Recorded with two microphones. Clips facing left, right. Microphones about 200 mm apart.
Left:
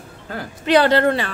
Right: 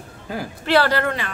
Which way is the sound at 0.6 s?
20° left (ahead or behind).